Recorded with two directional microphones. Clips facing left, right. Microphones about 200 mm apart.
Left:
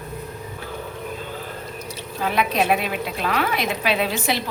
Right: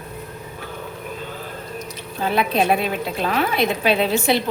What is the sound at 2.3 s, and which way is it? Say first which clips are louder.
A woman's voice: right 2 dB; 30° right (ahead or behind).